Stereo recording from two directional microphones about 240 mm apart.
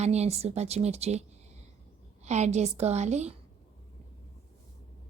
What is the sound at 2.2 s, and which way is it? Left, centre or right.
A woman's voice, right.